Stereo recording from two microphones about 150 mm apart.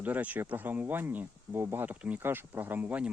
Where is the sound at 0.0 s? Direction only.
10° right (ahead or behind).